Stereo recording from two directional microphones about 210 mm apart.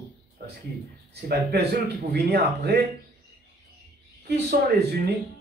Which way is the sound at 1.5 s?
50° right (ahead or behind).